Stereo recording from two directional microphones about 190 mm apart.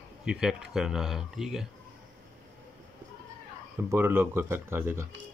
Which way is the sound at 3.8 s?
10° right (ahead or behind).